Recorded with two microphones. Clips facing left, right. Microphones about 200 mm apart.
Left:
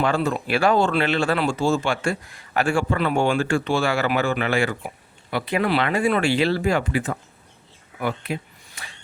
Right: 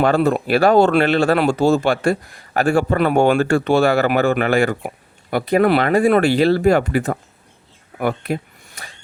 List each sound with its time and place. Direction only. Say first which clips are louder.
0.3 s speech: right 6 dB; 40° right (ahead or behind)
1.3 s speech: right 6 dB; 65° right (ahead or behind)
2.0 s speech: right 7 dB; 40° right (ahead or behind); by 3.9 s 60° right (ahead or behind)
3.9 s speech: right 6 dB; 50° right (ahead or behind)
6.7 s speech: right 5 dB; 55° right (ahead or behind)
7.9 s a sound: right 5 dB; 50° right (ahead or behind)